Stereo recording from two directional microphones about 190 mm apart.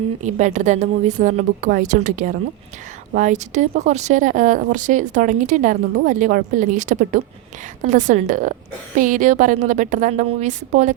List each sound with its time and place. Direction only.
0.2 s speech: 40° right (ahead or behind)